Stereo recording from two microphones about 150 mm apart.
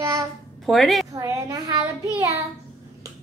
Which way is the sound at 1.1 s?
25° right (ahead or behind).